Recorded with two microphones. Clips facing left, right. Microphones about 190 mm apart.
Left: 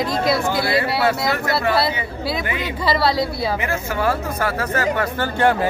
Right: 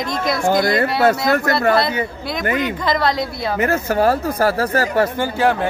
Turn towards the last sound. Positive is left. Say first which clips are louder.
# even
turn(degrees=0)  # may be behind; listen again after turning